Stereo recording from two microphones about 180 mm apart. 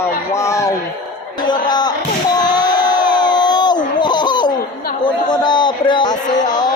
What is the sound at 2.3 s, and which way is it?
Crowd, 20° left (ahead or behind).